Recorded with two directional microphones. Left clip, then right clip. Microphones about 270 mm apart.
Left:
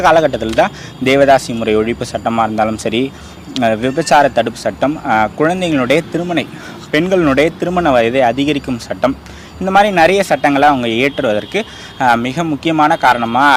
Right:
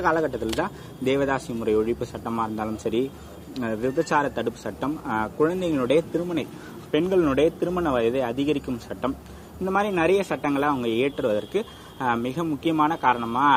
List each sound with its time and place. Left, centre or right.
0.0 s speech: left